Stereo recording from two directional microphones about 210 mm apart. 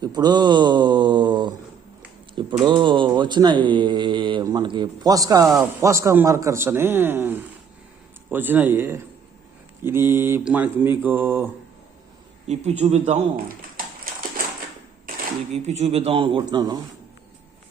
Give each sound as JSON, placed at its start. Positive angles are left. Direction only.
{"t": 0.0, "sound": "a man's voice", "side_deg": -20}
{"t": 12.5, "sound": "a man's voice", "side_deg": -30}
{"t": 13.7, "sound": "a sound", "side_deg": -45}
{"t": 15.5, "sound": "speech", "side_deg": -30}